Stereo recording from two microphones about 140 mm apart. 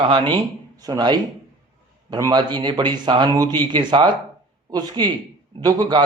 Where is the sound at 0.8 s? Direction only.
30° right (ahead or behind).